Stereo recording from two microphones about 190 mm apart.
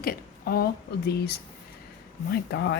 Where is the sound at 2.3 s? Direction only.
65° left (ahead or behind).